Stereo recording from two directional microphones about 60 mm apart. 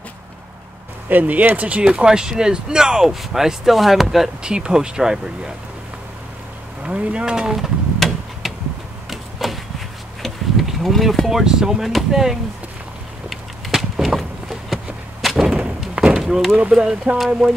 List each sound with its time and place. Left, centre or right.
1.0 s speech: right
1.9 s speech: centre
4.4 s speech: centre
6.8 s a sound: centre
9.1 s vehicle: centre
10.2 s speech: centre
13.3 s a sound: centre
15.2 s artillery fire: centre
17.3 s speech: centre